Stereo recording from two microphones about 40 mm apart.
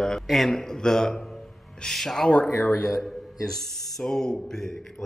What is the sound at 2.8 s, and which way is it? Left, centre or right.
Speech, centre.